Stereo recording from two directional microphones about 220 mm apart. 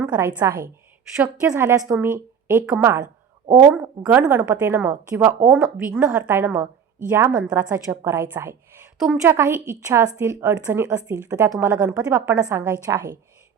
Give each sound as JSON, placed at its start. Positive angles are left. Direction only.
{"t": 0.0, "sound": "a woman's voice", "side_deg": -5}